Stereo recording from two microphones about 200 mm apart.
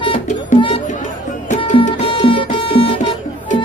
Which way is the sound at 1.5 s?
40° left (ahead or behind).